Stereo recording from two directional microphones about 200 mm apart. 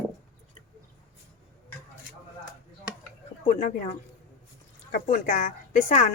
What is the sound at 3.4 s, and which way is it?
A woman's voice, 35° left (ahead or behind).